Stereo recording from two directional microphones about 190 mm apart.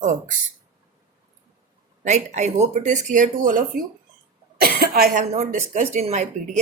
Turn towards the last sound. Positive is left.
turn(degrees=-35)  # may be behind; listen again after turning